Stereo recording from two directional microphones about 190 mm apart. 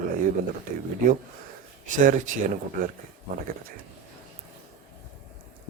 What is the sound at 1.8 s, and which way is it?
Speech, 45° right (ahead or behind).